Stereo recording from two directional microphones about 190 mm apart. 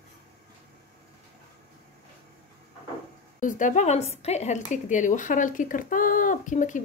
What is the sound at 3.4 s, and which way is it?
A woman's voice, 45° left (ahead or behind).